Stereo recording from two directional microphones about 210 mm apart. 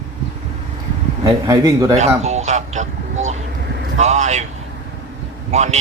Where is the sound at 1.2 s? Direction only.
15° right (ahead or behind).